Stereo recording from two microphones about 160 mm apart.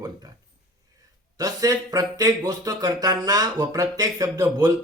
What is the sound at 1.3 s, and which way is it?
Speech, 20° right (ahead or behind).